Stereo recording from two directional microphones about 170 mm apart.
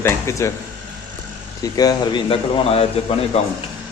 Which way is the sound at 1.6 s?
20° left (ahead or behind).